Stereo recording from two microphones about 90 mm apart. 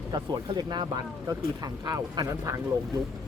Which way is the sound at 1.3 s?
40° right (ahead or behind).